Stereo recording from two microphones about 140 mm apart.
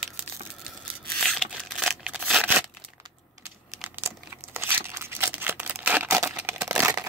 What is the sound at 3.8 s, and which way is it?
Crumpling, 15° right (ahead or behind).